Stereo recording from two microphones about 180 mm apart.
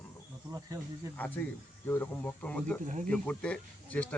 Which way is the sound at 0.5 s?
25° right (ahead or behind).